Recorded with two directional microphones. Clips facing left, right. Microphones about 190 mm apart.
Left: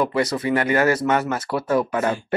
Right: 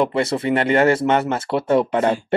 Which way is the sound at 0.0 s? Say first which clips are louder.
Right 2 dB; 25° right (ahead or behind).